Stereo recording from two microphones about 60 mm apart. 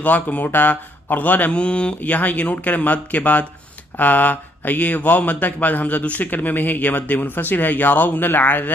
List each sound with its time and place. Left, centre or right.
0.0 s speech: left
1.5 s speech: centre